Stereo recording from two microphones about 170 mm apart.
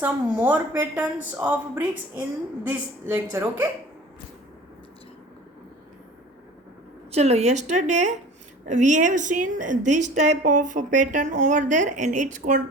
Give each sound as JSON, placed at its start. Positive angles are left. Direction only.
{"t": 0.0, "sound": "a woman's voice", "side_deg": -10}
{"t": 7.1, "sound": "a woman's voice", "side_deg": -40}